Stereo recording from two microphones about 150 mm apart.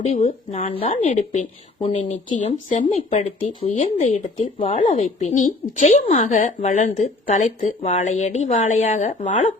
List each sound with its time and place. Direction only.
0.0 s speech: 50° left (ahead or behind)